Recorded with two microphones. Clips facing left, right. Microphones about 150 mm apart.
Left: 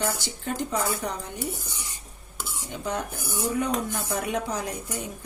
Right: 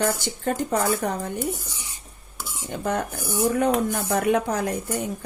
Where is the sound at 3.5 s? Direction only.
55° right (ahead or behind).